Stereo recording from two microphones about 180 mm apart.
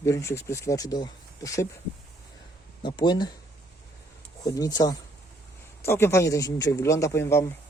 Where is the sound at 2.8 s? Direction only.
25° left (ahead or behind).